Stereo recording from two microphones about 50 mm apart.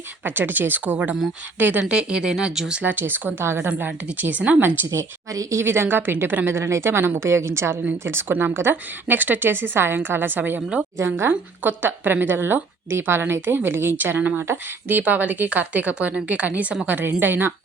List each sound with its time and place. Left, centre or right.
0.3 s speech: right
1.8 s speech: centre
2.8 s speech: right
3.4 s a woman's voice: right
3.8 s speech: right
5.6 s speech: right
6.6 s a woman's voice: right
8.3 s speech: right
8.7 s speech: right
10.9 s a woman's voice: right
11.3 s speech: right
15.0 s a woman's voice: right